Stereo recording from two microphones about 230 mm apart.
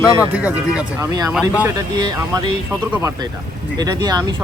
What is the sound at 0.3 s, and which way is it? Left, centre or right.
Speech, centre.